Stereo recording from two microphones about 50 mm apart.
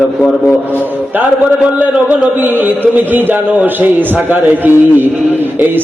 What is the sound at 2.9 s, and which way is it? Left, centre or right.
A man's voice, right.